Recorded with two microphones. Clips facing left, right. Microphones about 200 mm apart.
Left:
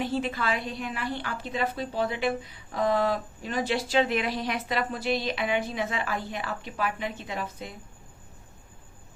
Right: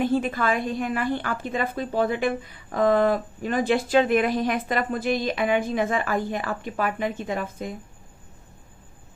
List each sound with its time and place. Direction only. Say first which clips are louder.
0.0 s a woman's voice: right 6 dB; 50° right (ahead or behind)